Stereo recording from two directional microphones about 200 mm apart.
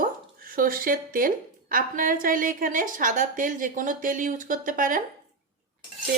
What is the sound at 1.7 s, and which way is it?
A woman's voice, 45° right (ahead or behind).